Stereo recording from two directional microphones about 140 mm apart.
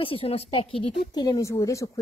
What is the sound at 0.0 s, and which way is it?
A woman's voice, 40° left (ahead or behind).